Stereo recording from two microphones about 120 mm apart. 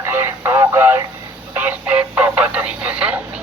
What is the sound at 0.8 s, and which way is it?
Radio, 15° right (ahead or behind).